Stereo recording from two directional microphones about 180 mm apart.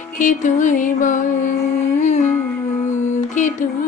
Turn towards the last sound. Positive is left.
turn(degrees=45)  # may be behind; listen again after turning